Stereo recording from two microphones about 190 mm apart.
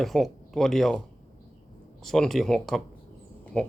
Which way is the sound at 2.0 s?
Centre (ahead or behind).